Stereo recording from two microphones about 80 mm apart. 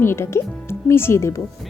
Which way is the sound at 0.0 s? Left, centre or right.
Left.